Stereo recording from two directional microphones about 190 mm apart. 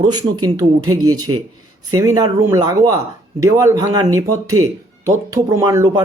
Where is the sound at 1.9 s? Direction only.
20° right (ahead or behind).